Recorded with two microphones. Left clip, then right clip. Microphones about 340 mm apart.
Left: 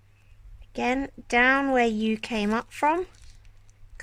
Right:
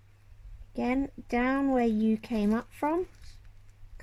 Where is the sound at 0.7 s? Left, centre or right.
Left.